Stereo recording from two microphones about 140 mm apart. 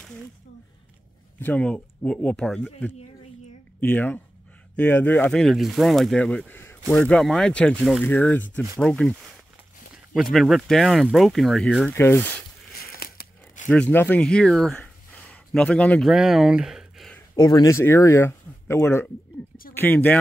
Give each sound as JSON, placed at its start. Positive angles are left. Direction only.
{"t": 1.4, "sound": "speech", "side_deg": 10}
{"t": 5.4, "sound": "speech", "side_deg": 0}
{"t": 6.9, "sound": "speech", "side_deg": 5}
{"t": 10.3, "sound": "speech", "side_deg": 0}
{"t": 11.9, "sound": "speech", "side_deg": 15}
{"t": 12.7, "sound": "tearing", "side_deg": 90}
{"t": 13.7, "sound": "speech", "side_deg": 10}
{"t": 16.1, "sound": "speech", "side_deg": -5}
{"t": 17.4, "sound": "speech", "side_deg": 30}